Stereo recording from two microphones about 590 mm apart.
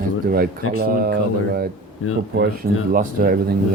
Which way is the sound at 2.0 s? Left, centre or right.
Left.